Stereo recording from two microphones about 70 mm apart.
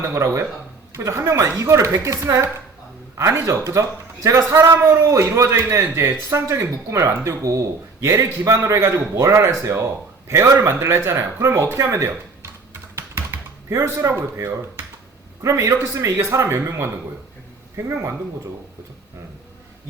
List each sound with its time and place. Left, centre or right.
0.1 s a man's voice: right
13.0 s typing: right
15.4 s a man's voice: right